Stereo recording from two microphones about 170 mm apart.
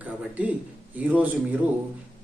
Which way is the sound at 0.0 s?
10° right (ahead or behind).